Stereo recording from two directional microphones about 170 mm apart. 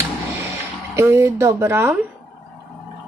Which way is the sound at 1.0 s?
15° right (ahead or behind).